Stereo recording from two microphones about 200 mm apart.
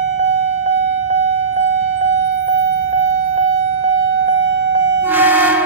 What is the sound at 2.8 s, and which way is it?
Civil defense siren, 35° right (ahead or behind).